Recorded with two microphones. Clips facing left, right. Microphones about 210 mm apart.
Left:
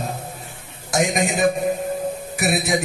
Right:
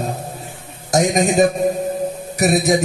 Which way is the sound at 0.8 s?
40° right (ahead or behind).